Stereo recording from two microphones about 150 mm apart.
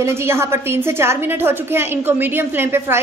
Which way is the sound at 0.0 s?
15° right (ahead or behind).